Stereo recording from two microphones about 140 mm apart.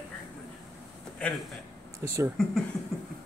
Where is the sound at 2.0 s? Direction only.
20° right (ahead or behind).